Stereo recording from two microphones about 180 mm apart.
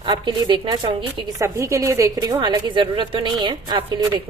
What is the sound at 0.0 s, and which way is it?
A woman's voice, 25° right (ahead or behind).